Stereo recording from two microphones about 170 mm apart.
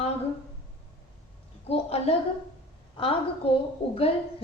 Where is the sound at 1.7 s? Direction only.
35° left (ahead or behind).